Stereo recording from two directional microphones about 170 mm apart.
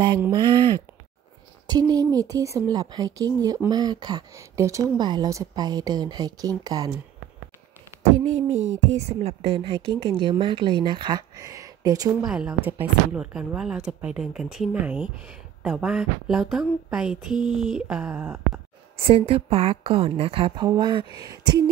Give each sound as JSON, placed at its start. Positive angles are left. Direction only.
{"t": 0.3, "sound": "speech", "side_deg": -25}
{"t": 8.4, "sound": "speech", "side_deg": -40}
{"t": 12.3, "sound": "a sound", "side_deg": -5}
{"t": 18.9, "sound": "a woman's voice", "side_deg": -35}